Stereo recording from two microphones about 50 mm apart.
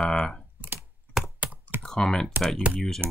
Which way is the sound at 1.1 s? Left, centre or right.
Left.